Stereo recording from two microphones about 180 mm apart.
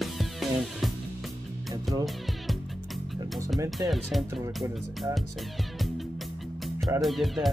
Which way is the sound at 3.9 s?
Centre (ahead or behind).